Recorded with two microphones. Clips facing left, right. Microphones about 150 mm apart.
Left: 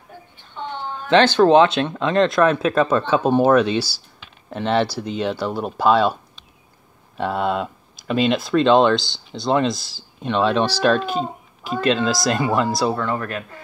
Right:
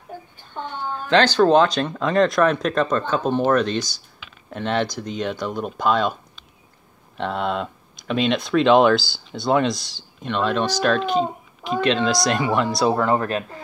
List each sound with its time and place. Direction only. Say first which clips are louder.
1.4 s speech: left 2 dB; 5° left (ahead or behind)
13.0 s speech: right 4 dB; 30° right (ahead or behind)